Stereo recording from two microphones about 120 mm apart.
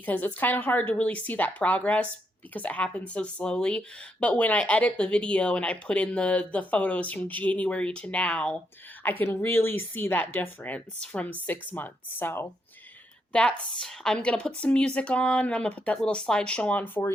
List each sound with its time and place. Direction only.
0.0 s speech: 15° left (ahead or behind)
13.3 s speech: 5° left (ahead or behind)